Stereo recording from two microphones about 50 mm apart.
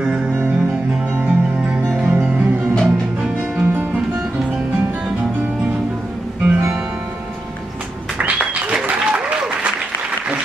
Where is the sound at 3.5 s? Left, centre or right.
Right.